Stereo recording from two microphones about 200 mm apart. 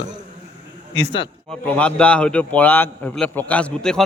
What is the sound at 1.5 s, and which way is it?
A man's voice, 5° left (ahead or behind).